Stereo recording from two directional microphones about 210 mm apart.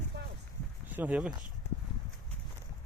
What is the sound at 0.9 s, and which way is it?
Speech, 10° right (ahead or behind).